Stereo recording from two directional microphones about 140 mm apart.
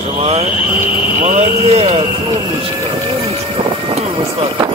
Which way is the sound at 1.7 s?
50° right (ahead or behind).